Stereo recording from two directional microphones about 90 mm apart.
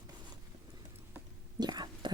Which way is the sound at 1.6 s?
55° right (ahead or behind).